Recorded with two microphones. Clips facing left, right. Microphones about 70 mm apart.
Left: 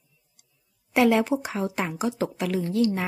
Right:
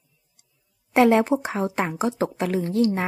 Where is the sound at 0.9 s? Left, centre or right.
Right.